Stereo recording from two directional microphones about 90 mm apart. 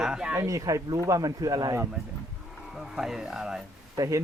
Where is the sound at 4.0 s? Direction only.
40° right (ahead or behind).